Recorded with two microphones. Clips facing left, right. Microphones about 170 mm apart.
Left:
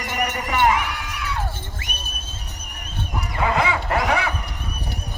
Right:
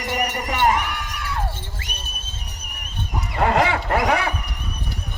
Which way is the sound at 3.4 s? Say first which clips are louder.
Right 3 dB; 65° right (ahead or behind).